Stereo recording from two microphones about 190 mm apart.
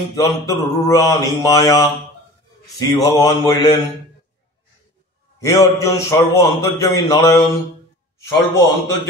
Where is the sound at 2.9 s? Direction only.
20° left (ahead or behind).